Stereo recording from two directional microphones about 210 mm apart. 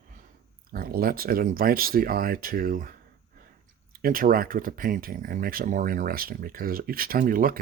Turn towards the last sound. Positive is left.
turn(degrees=-40)  # may be behind; listen again after turning